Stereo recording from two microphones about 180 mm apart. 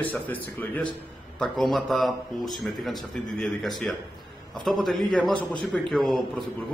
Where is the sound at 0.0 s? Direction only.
10° left (ahead or behind).